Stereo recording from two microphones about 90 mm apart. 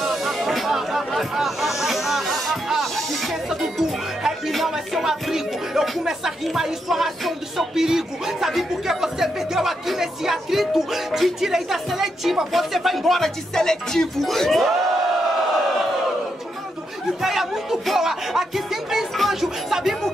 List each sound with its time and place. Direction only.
0.0 s a sound: centre (ahead or behind)
3.4 s speech: 5° right (ahead or behind)
17.2 s speech: 5° right (ahead or behind)